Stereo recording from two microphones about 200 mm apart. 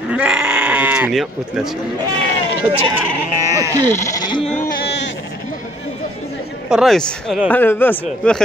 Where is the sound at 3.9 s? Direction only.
15° left (ahead or behind).